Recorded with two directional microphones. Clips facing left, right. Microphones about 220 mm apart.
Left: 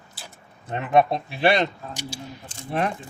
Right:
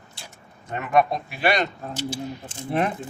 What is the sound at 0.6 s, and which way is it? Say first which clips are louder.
Speech: left 1 dB; 30° left (ahead or behind).